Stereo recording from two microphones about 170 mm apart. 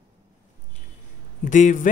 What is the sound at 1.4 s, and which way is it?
Speech, 50° left (ahead or behind).